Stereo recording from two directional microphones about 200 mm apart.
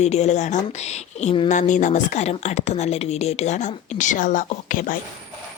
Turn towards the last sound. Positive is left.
turn(degrees=40)  # may be behind; listen again after turning